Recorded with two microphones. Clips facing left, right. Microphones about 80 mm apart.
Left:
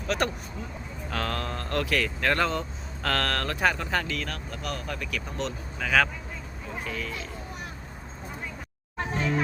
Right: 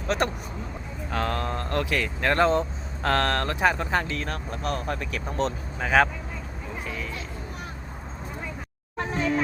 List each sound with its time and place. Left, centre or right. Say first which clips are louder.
0.1 s speech: right 1 dB; right